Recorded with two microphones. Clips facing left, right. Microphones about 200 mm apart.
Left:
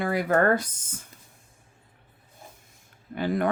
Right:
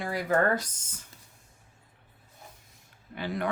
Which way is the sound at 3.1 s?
50° left (ahead or behind).